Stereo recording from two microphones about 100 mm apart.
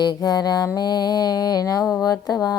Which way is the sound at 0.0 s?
40° left (ahead or behind).